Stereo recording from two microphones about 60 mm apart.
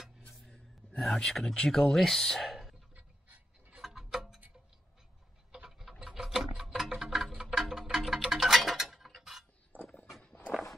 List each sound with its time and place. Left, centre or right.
0.3 s speech: centre
3.8 s music: centre
5.5 s clock: centre
6.0 s music: centre
9.7 s walk: left
10.2 s walk: left